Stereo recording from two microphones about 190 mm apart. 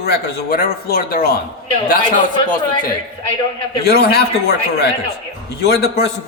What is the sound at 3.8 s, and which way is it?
A man's voice, 55° left (ahead or behind).